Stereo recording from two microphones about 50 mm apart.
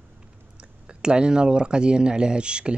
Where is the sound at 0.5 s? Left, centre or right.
Centre.